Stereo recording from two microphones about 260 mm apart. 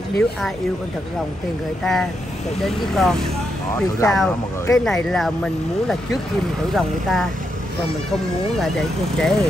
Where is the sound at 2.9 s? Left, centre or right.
Centre.